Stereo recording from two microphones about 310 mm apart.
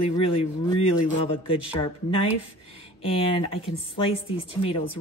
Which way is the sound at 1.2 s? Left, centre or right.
Centre.